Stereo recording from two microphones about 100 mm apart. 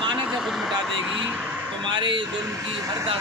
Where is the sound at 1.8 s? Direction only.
50° right (ahead or behind).